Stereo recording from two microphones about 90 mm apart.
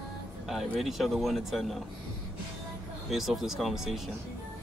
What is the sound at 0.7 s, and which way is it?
Speech, centre (ahead or behind).